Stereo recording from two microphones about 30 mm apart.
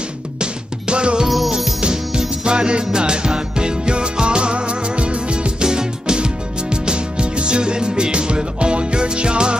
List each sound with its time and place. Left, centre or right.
0.4 s music: right
5.6 s music: right